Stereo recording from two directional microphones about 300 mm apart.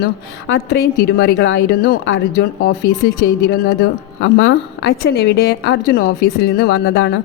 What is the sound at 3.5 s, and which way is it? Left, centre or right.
A woman's voice, left.